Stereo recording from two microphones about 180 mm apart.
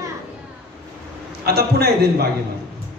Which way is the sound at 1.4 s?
60° right (ahead or behind).